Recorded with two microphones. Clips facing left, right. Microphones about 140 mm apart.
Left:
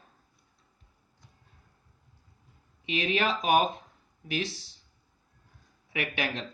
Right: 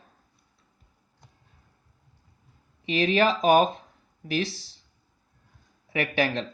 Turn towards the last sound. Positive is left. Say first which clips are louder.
# right 7 dB
turn(degrees=-35)  # may be behind; listen again after turning